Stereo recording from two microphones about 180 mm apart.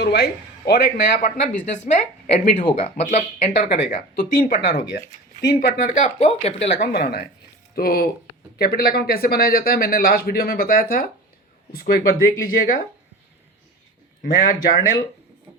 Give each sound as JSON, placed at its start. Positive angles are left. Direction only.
{"t": 0.0, "sound": "speech", "side_deg": 60}
{"t": 1.7, "sound": "speech", "side_deg": 45}
{"t": 4.6, "sound": "speech", "side_deg": 65}
{"t": 6.7, "sound": "speech", "side_deg": 60}
{"t": 14.3, "sound": "speech", "side_deg": 50}